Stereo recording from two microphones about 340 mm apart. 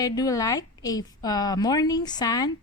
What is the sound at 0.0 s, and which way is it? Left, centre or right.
A woman's voice, centre.